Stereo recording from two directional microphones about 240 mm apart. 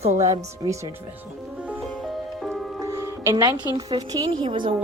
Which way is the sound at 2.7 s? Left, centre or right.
Centre.